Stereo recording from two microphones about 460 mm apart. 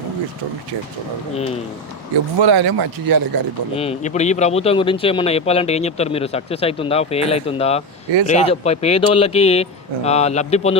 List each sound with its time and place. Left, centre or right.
2.4 s speech: right
3.8 s speech: centre